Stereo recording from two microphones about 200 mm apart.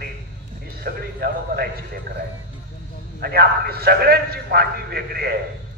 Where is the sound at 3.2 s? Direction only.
50° right (ahead or behind).